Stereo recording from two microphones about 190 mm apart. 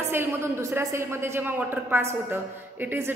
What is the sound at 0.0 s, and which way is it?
Speech, 10° right (ahead or behind).